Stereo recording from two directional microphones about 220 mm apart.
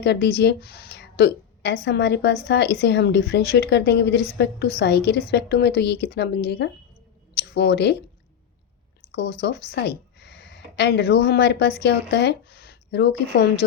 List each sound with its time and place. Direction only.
0.0 s a woman's voice: 50° left (ahead or behind)
9.1 s a woman's voice: 50° left (ahead or behind)